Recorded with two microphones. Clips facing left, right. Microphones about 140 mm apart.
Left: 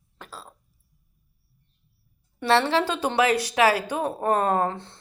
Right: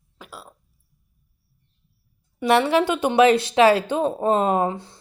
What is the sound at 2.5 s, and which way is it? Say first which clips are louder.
Speech: right 3 dB; 15° right (ahead or behind).